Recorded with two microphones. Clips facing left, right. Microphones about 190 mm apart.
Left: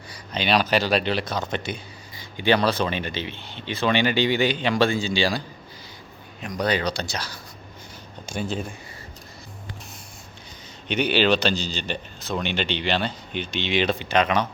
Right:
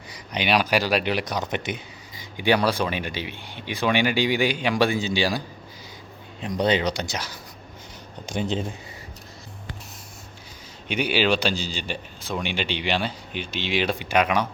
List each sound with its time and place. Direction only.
0.1 s speech: 15° right (ahead or behind)
6.4 s speech: 25° right (ahead or behind)
10.8 s speech: 10° right (ahead or behind)